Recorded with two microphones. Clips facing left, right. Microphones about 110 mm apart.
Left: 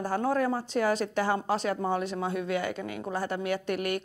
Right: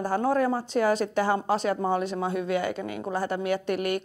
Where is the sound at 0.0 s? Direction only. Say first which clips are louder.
Right 3 dB; 25° right (ahead or behind).